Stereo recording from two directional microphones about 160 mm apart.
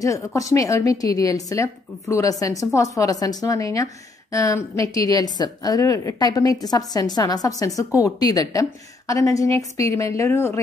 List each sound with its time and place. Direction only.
0.0 s a woman's voice: 20° left (ahead or behind)